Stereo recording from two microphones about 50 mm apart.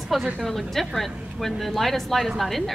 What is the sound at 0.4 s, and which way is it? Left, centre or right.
Speech, centre.